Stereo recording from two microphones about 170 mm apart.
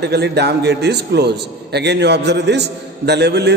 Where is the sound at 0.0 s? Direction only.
75° right (ahead or behind).